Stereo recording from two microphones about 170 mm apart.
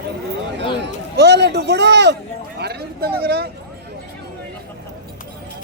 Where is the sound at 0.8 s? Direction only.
80° right.